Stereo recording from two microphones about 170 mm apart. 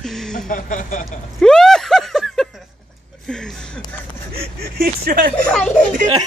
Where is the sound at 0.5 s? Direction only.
50° left (ahead or behind).